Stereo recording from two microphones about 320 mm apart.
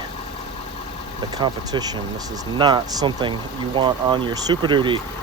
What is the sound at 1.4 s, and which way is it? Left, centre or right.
Speech, centre.